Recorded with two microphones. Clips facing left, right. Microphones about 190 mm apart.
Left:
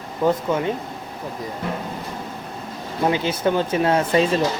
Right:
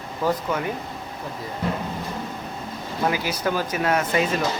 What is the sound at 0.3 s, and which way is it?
Speech, 25° left (ahead or behind).